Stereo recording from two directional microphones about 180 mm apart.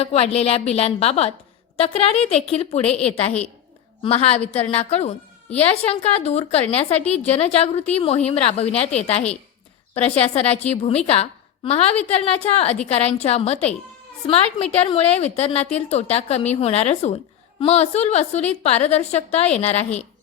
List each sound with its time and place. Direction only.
0.0 s a woman's voice: 35° left (ahead or behind)
4.0 s a woman's voice: 35° left (ahead or behind)